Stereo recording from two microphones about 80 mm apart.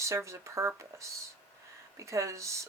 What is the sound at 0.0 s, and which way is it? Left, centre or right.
Speech, right.